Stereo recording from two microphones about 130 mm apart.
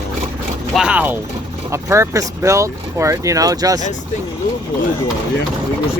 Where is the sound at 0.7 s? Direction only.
5° right (ahead or behind).